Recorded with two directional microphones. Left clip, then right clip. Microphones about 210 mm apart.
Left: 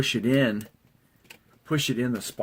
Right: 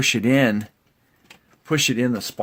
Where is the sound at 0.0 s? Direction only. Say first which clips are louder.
Right 5 dB; 45° right (ahead or behind).